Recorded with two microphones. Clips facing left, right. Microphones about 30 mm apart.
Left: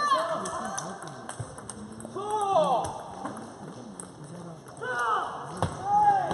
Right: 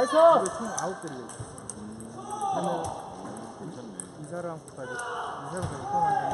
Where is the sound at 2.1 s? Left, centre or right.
Left.